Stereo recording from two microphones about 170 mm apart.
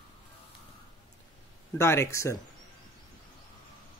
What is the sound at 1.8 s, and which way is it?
Speech, 15° left (ahead or behind).